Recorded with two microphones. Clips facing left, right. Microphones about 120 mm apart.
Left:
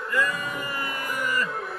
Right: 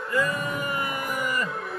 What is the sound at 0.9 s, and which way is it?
Music, 5° right (ahead or behind).